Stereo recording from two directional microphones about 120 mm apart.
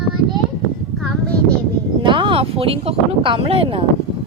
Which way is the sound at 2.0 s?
45° right (ahead or behind).